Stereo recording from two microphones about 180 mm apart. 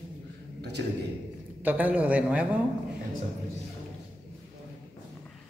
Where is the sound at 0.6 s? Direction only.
65° right (ahead or behind).